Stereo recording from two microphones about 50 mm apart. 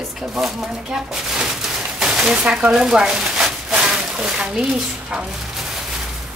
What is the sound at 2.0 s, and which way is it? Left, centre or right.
Speech, centre.